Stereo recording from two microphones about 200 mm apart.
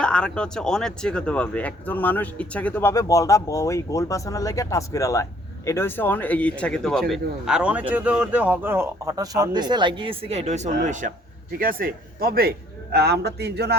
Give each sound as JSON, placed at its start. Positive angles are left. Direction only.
{"t": 0.0, "sound": "a man's voice", "side_deg": 5}